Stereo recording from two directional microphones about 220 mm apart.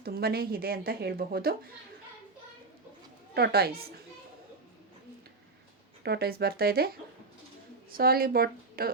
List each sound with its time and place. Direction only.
0.0 s a woman's voice: 45° right (ahead or behind)
3.3 s a woman's voice: 45° right (ahead or behind)
6.0 s a woman's voice: 45° right (ahead or behind)
7.9 s a woman's voice: 40° right (ahead or behind)